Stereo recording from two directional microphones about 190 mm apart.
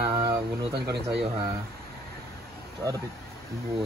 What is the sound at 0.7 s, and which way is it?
Speech, 60° right (ahead or behind).